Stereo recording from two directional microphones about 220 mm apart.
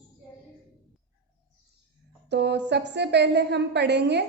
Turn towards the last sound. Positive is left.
turn(degrees=-50)  # may be behind; listen again after turning